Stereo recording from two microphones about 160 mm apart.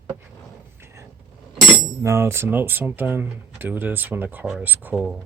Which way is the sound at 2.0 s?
15° right (ahead or behind).